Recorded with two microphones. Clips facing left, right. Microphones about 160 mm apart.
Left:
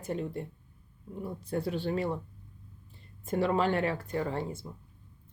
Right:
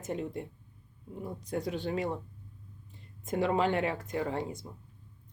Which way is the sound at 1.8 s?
15° right (ahead or behind).